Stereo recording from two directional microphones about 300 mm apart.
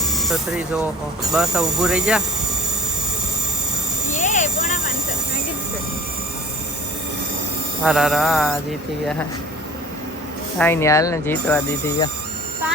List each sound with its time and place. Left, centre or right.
0.1 s speech: centre
4.1 s a sound: left
7.9 s speech: centre
10.6 s speech: centre